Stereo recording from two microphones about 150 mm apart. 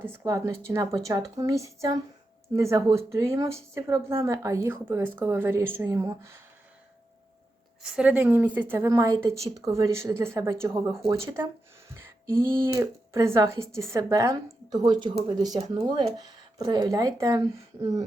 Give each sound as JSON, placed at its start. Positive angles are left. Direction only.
{"t": 0.0, "sound": "speech", "side_deg": -15}
{"t": 7.8, "sound": "speech", "side_deg": -5}